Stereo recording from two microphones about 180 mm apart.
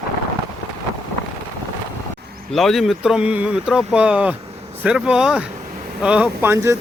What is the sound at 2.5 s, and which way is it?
Speech, centre (ahead or behind).